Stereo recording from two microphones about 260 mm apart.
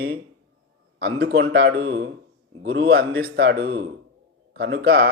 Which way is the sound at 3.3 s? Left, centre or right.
Right.